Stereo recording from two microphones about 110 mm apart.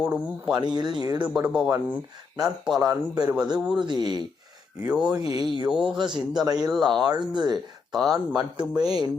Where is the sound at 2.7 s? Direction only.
35° right (ahead or behind).